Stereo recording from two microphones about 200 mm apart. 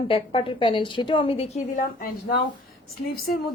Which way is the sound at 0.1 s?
25° left (ahead or behind).